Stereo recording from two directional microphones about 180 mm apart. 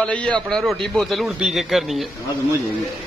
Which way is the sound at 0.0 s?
5° left (ahead or behind).